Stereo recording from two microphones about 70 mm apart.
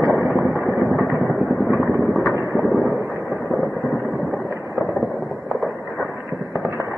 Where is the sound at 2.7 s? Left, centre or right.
Right.